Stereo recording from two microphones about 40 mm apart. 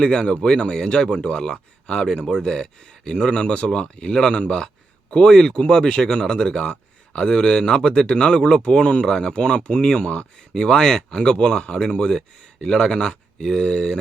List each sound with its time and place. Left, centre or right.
0.0 s speech: left